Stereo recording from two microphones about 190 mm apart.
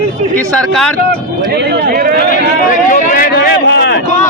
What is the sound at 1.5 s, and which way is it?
Speech, 60° right (ahead or behind).